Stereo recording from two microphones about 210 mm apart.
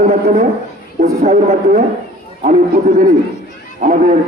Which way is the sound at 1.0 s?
35° right (ahead or behind).